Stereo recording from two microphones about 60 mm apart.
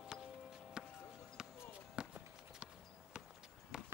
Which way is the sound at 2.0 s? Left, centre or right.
Centre.